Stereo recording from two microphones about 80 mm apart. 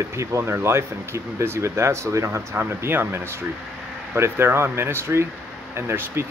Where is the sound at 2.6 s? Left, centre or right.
Right.